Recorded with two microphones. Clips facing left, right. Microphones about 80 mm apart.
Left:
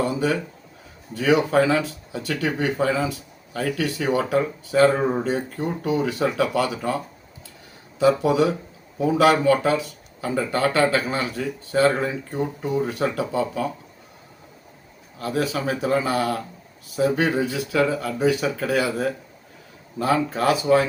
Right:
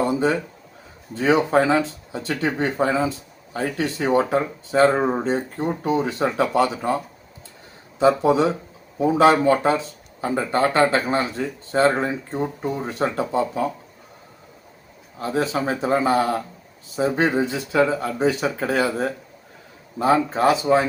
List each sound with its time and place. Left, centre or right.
0.0 s speech: right
15.2 s speech: right